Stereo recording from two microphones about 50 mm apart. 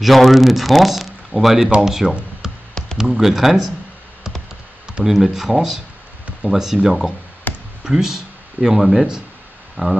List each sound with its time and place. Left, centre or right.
0.0 s speech: centre
2.4 s a sound: centre
3.0 s speech: centre
5.0 s speech: centre
7.5 s a sound: left
7.8 s speech: centre
9.8 s speech: right